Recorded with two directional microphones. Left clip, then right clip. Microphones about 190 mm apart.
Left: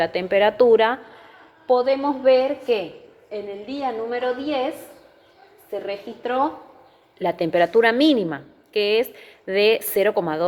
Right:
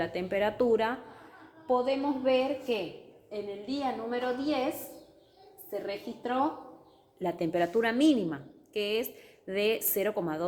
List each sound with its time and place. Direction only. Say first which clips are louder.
0.0 s a woman's voice: left 11 dB; 15° left (ahead or behind)
3.2 s a woman's voice: left 6 dB; 5° right (ahead or behind)
5.8 s a woman's voice: left 8 dB; centre (ahead or behind)
7.2 s a woman's voice: left 10 dB; 15° left (ahead or behind)